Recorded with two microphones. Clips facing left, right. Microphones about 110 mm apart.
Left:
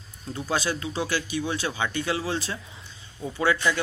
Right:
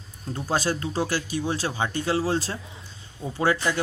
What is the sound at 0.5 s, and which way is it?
Speech, 40° right (ahead or behind).